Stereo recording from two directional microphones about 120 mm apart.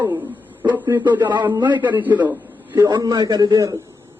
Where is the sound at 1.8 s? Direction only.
15° right (ahead or behind).